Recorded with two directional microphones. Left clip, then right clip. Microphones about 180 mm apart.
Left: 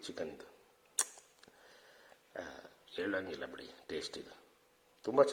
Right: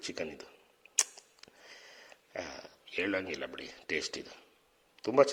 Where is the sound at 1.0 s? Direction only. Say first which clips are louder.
Right 7 dB; 20° right (ahead or behind).